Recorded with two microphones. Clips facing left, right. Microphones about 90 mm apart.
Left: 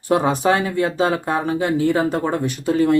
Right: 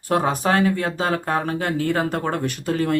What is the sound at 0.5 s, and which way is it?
Speech, 20° left (ahead or behind).